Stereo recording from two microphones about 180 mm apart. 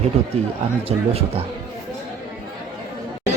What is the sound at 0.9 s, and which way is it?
Speech, 35° right (ahead or behind).